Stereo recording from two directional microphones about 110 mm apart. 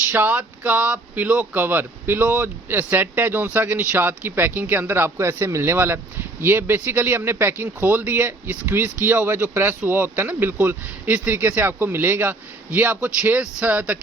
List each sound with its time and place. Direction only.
0.1 s speech: 15° right (ahead or behind)